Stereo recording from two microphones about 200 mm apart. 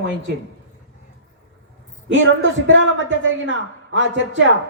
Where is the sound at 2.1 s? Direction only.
70° right (ahead or behind).